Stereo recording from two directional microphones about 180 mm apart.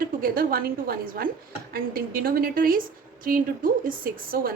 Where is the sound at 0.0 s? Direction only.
55° right (ahead or behind).